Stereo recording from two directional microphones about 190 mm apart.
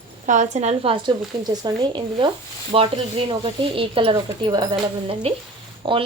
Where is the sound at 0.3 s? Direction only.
40° right (ahead or behind).